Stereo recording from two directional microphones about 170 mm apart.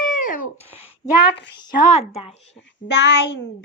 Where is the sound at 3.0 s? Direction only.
90° left.